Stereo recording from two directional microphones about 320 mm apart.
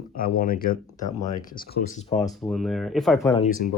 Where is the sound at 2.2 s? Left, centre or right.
Centre.